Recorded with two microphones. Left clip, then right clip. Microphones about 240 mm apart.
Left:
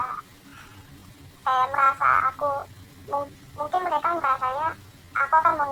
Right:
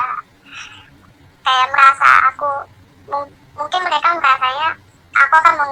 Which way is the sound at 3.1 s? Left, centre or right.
Right.